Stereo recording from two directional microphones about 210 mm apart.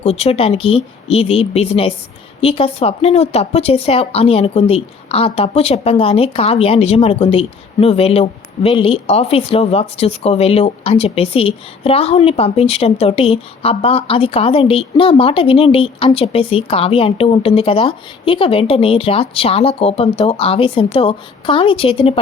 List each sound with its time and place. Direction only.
0.0 s speech: 30° left (ahead or behind)